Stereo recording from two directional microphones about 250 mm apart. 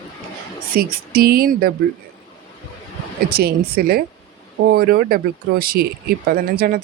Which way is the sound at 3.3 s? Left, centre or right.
Right.